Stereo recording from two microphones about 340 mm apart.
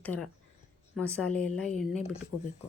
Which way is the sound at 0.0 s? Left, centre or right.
Centre.